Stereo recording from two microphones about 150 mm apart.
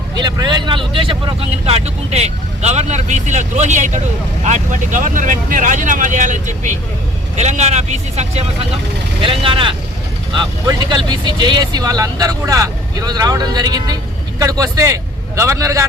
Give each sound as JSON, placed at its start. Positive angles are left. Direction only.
{"t": 0.2, "sound": "speech", "side_deg": -30}
{"t": 9.2, "sound": "speech", "side_deg": -35}